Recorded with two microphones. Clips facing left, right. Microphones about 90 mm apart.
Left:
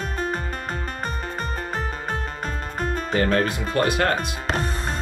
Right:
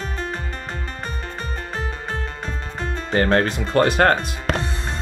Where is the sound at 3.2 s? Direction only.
45° right (ahead or behind).